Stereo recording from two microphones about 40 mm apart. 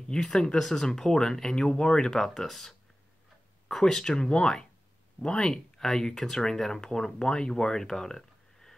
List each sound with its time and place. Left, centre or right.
0.1 s speech: centre
5.2 s speech: centre